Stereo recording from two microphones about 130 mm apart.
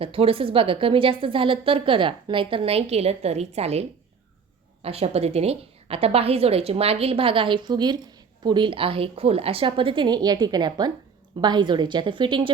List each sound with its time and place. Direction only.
0.0 s a woman's voice: 45° right (ahead or behind)